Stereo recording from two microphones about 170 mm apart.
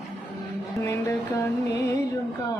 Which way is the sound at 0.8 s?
15° left (ahead or behind).